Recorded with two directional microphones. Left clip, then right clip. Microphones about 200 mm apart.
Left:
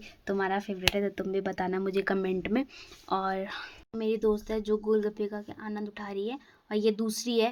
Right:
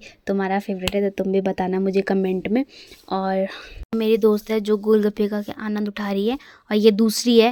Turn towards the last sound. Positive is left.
turn(degrees=-45)  # may be behind; listen again after turning